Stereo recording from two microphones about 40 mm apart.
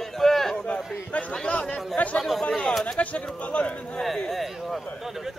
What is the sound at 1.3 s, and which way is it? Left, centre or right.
Chatter, left.